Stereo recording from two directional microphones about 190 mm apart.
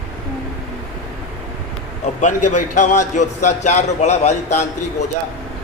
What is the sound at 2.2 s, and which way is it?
A man's voice, 40° left (ahead or behind).